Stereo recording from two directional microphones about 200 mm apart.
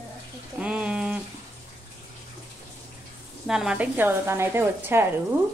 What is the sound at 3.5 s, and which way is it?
Speech, 5° right (ahead or behind).